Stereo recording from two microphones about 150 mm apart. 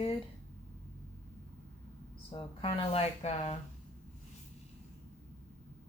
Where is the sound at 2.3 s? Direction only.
35° left (ahead or behind).